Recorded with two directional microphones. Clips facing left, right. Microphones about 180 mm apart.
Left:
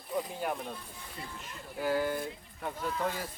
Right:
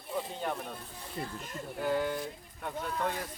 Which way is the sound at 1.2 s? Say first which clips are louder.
Right 7 dB; 45° right (ahead or behind).